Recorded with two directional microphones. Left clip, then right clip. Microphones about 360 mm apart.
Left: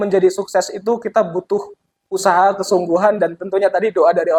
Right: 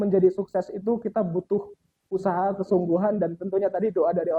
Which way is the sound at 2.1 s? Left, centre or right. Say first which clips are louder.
Left 11 dB; centre.